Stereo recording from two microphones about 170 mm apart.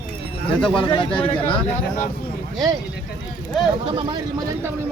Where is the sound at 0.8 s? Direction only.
30° left (ahead or behind).